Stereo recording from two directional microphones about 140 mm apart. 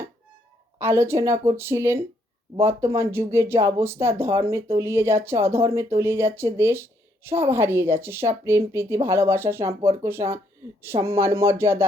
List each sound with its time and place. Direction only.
0.8 s speech: 15° right (ahead or behind)